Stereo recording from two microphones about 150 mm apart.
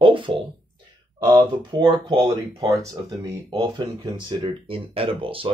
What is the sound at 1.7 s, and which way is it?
Speech, 30° right (ahead or behind).